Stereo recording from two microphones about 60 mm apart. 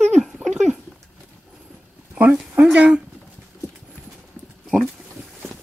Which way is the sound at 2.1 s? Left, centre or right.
Right.